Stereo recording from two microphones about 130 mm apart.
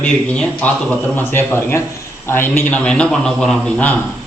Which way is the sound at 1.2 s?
20° left (ahead or behind).